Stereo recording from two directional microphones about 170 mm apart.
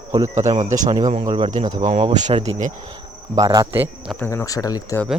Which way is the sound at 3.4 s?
20° right (ahead or behind).